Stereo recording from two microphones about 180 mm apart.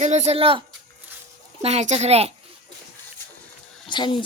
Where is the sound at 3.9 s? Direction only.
25° left (ahead or behind).